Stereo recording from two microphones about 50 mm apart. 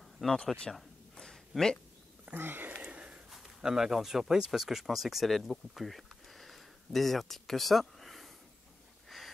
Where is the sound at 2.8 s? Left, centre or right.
Right.